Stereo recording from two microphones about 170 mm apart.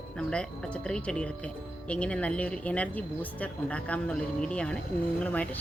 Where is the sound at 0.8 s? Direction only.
5° left (ahead or behind).